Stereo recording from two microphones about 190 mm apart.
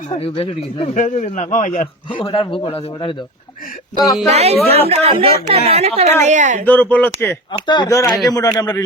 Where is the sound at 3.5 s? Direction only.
45° left (ahead or behind).